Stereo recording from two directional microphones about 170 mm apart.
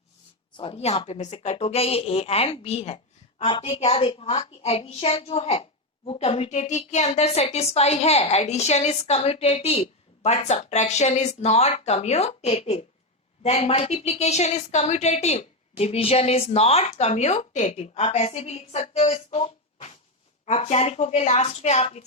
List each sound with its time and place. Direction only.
0.5 s a woman's voice: 35° left (ahead or behind)